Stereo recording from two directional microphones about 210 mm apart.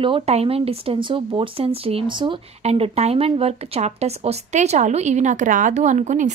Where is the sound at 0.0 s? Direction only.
25° right (ahead or behind).